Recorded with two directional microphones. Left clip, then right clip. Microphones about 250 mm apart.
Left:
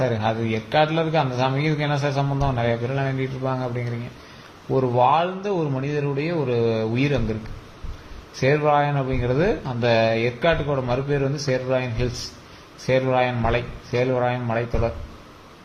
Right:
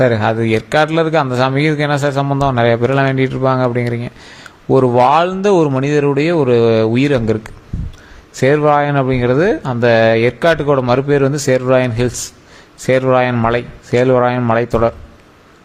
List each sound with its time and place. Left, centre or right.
0.0 s a man's voice: right
8.4 s a man's voice: right